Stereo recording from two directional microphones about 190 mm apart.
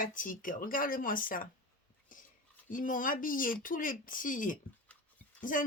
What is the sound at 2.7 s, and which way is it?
Speech, 45° left (ahead or behind).